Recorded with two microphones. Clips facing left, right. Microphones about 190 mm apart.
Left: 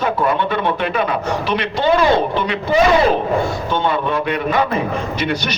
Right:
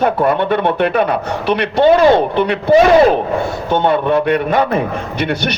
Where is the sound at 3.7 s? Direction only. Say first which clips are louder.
Right 5 dB; 55° right (ahead or behind).